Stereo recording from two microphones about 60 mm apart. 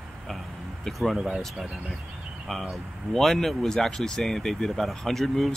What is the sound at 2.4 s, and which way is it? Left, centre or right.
Speech, centre.